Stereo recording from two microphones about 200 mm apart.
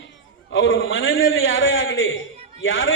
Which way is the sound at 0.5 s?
75° left (ahead or behind).